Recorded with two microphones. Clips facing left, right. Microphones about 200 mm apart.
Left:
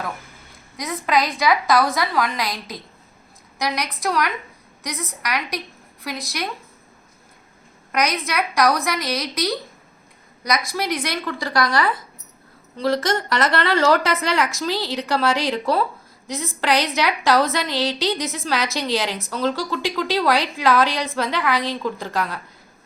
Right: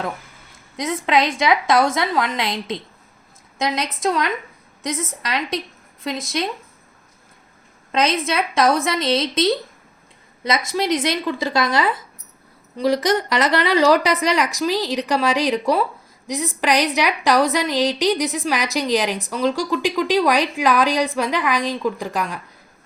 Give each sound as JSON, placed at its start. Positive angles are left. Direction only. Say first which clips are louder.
{"t": 1.0, "sound": "a woman's voice", "louder": "right 1 dB", "side_deg": -25}
{"t": 7.9, "sound": "a woman's voice", "louder": "right 3 dB", "side_deg": -25}